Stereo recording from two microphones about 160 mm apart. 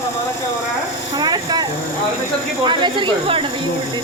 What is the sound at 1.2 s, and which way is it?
Speech, 25° right (ahead or behind).